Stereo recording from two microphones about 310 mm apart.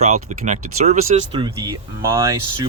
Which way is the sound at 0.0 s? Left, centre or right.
Right.